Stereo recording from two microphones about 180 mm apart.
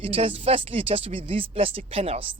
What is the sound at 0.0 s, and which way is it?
Speech, 30° right (ahead or behind).